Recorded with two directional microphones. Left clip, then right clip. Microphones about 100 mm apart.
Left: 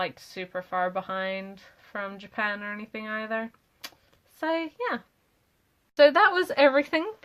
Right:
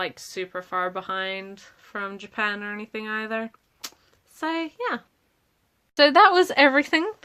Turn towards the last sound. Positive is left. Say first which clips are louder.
# right 3 dB
turn(degrees=-55)  # may be behind; listen again after turning